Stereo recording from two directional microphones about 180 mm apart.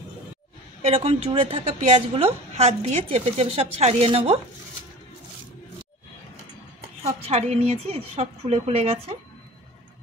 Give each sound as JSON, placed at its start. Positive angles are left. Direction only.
{"t": 0.8, "sound": "a woman's voice", "side_deg": -35}
{"t": 7.2, "sound": "a woman's voice", "side_deg": -35}